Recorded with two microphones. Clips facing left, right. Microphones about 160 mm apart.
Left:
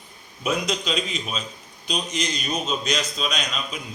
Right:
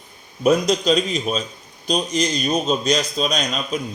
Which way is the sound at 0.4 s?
40° right (ahead or behind).